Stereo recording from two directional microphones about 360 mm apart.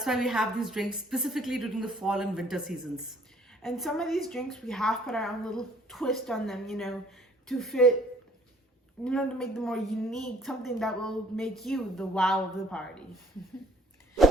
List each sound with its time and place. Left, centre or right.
0.0 s a woman's voice: centre
9.0 s a woman's voice: centre